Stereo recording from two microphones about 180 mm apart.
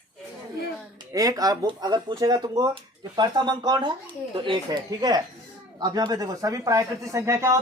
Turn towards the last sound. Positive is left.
turn(degrees=-15)  # may be behind; listen again after turning